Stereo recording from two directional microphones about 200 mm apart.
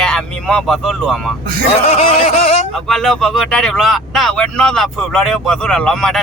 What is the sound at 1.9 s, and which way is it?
Speech, 35° left (ahead or behind).